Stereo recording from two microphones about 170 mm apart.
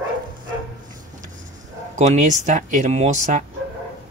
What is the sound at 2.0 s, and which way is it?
Speech, 45° right (ahead or behind).